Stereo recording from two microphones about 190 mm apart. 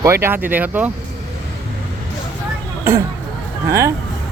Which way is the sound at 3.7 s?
15° right (ahead or behind).